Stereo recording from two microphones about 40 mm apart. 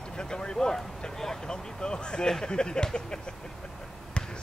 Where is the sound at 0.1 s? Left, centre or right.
Centre.